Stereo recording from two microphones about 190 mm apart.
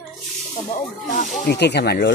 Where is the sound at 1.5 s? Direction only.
60° left (ahead or behind).